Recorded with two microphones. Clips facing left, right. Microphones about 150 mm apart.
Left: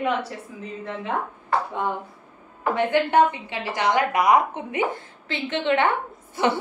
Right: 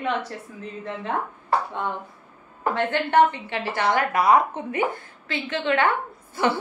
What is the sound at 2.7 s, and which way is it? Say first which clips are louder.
A woman's voice: left 1 dB; 10° left (ahead or behind).